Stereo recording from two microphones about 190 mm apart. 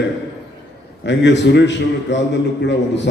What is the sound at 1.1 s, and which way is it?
A man's voice, 70° left (ahead or behind).